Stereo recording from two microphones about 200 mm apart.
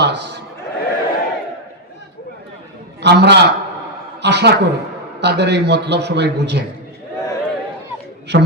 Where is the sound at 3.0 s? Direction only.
55° right (ahead or behind).